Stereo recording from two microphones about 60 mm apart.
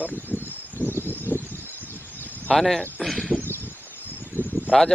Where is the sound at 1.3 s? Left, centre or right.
Left.